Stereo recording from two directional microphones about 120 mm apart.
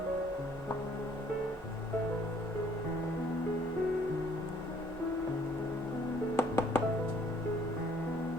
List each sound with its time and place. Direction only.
6.3 s music: 20° left (ahead or behind)